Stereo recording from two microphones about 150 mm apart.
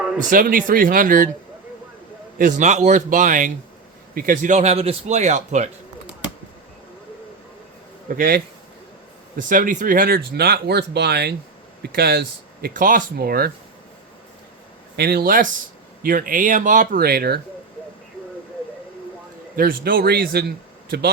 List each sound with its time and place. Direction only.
0.3 s speech: 65° right (ahead or behind)
2.4 s a man's voice: 50° right (ahead or behind)
8.0 s speech: 70° right (ahead or behind); by 12.2 s 90° right
12.6 s speech: 65° right (ahead or behind); by 13.5 s 90° right
14.9 s speech: 90° right
19.5 s speech: 80° right